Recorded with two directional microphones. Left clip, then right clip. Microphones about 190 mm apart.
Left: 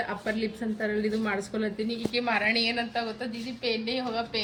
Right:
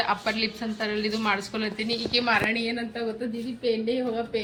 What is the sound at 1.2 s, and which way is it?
Speech, 50° right (ahead or behind).